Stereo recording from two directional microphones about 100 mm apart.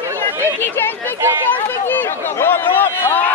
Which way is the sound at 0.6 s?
20° left (ahead or behind).